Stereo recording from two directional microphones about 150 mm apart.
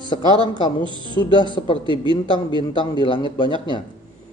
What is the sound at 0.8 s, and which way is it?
Speech, 35° right (ahead or behind).